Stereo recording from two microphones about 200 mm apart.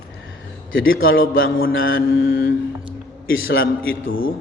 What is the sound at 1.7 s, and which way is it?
Speech, 75° left (ahead or behind).